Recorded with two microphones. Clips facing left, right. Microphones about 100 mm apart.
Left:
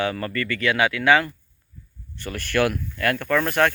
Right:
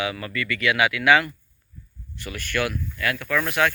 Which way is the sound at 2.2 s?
40° left (ahead or behind).